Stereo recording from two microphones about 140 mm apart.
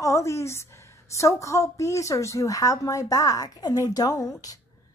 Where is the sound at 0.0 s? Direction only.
20° left (ahead or behind).